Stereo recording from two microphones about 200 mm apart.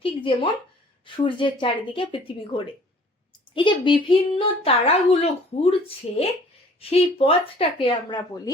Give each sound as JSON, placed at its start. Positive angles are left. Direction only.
{"t": 0.0, "sound": "speech", "side_deg": 25}